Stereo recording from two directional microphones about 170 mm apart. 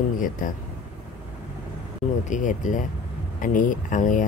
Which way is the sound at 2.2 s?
50° left (ahead or behind).